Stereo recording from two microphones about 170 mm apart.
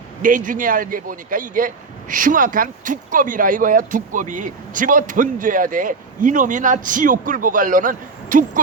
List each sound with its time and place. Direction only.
0.2 s speech: 50° right (ahead or behind)